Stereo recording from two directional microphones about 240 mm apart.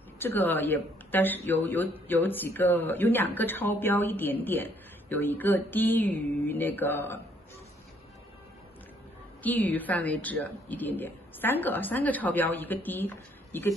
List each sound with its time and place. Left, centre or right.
0.2 s speech: centre
9.4 s speech: centre